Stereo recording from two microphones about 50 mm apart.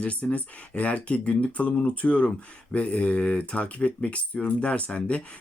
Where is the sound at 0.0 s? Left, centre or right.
Left.